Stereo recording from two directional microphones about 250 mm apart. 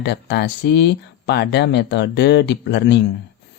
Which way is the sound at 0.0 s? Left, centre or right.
Left.